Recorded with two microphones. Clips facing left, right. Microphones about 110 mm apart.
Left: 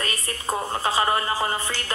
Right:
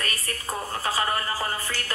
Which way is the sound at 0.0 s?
25° left (ahead or behind).